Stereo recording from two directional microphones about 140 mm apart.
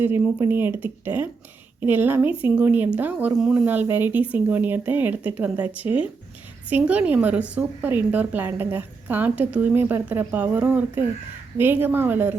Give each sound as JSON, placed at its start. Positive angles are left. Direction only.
{"t": 0.0, "sound": "a woman's voice", "side_deg": -15}